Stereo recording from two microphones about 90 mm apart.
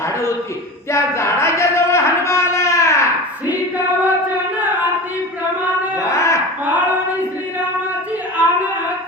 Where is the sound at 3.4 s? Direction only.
20° right (ahead or behind).